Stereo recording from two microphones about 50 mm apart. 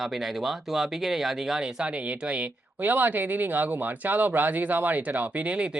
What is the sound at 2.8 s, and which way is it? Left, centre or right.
Speech, right.